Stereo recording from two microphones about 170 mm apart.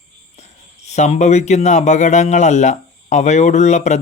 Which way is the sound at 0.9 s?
40° left (ahead or behind).